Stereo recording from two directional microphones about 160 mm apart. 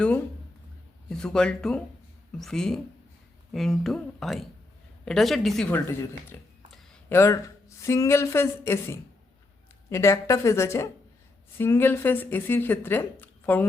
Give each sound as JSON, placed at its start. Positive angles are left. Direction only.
{"t": 1.1, "sound": "speech", "side_deg": 5}
{"t": 6.3, "sound": "speech", "side_deg": 10}